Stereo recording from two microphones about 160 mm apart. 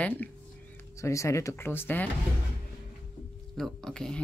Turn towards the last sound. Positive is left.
turn(degrees=5)  # may be behind; listen again after turning